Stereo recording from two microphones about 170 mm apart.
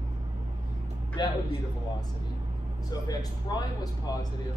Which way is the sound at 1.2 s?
25° left (ahead or behind).